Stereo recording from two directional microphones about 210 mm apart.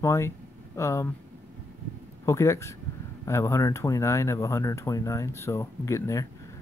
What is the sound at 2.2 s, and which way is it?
Speech, 15° left (ahead or behind).